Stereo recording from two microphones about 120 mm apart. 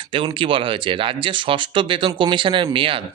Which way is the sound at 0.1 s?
45° right (ahead or behind).